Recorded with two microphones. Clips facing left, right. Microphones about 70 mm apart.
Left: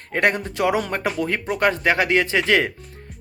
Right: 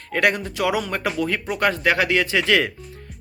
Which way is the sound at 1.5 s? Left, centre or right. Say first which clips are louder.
Left 1 dB; left.